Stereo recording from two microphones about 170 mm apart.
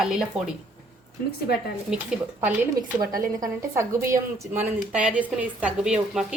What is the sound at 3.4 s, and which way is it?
A woman's voice, 15° right (ahead or behind).